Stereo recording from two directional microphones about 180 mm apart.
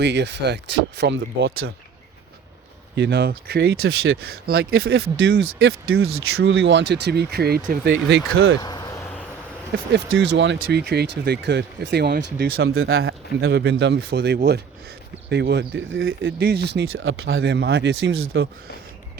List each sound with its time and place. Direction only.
0.0 s speech: 70° right (ahead or behind)
2.9 s speech: 70° right (ahead or behind)
8.6 s a sound: 20° left (ahead or behind)
9.7 s speech: 80° right